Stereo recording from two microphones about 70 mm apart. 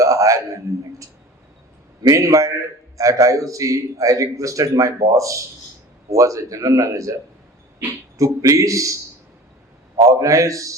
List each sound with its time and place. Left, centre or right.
0.0 s a sound: right
2.0 s a man's voice: right
8.2 s a man's voice: right
10.0 s a man's voice: right